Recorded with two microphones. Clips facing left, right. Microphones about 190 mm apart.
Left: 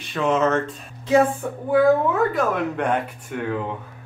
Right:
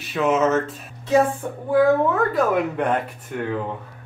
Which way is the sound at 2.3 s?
5° right (ahead or behind).